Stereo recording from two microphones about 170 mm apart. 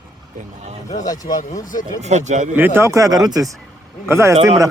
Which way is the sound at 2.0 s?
45° right (ahead or behind).